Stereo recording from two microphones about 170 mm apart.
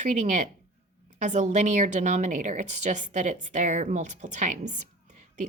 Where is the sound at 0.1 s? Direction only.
45° right (ahead or behind).